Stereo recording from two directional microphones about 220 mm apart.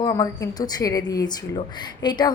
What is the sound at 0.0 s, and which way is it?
A woman's voice, 15° left (ahead or behind).